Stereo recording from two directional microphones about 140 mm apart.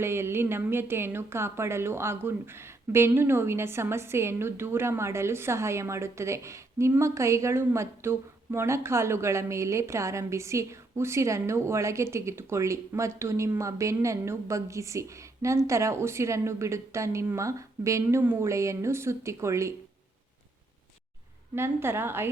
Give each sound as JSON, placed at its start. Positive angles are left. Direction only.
{"t": 0.0, "sound": "speech", "side_deg": -15}
{"t": 21.5, "sound": "a woman's voice", "side_deg": -15}